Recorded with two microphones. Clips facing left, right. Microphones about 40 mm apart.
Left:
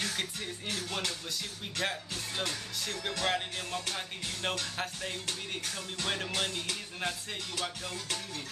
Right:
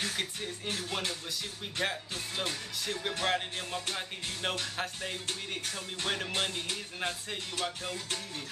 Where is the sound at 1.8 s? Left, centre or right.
Centre.